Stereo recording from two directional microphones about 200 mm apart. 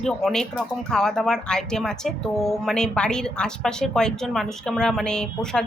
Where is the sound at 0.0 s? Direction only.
Centre (ahead or behind).